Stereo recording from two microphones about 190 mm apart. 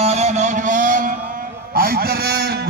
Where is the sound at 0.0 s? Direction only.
35° right (ahead or behind).